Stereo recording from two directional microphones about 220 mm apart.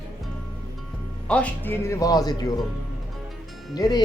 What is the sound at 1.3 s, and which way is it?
Speech, 5° left (ahead or behind).